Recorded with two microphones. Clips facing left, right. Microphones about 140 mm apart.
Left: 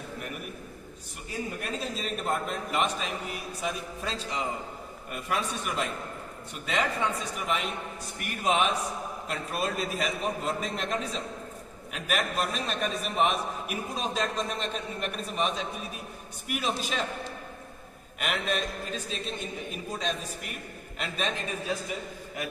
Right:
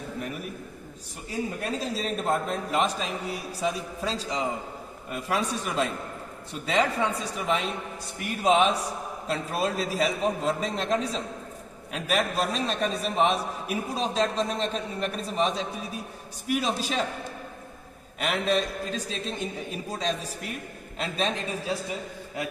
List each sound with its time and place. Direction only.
1.6 s a man's voice: 35° right (ahead or behind)
18.2 s a man's voice: 35° right (ahead or behind)